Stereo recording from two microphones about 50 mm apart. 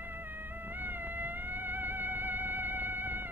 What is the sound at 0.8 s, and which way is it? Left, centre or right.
Music, right.